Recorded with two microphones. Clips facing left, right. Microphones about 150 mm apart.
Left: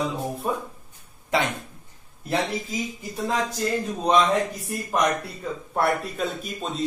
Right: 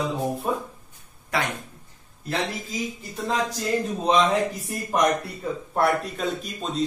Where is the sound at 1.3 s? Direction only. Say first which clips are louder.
Left 3 dB; 25° left (ahead or behind).